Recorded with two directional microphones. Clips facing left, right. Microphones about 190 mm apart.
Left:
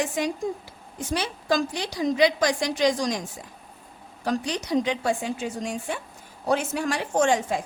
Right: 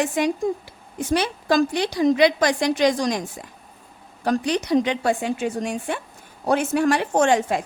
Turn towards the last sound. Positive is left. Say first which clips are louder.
# right 3 dB
turn(degrees=-65)  # may be behind; listen again after turning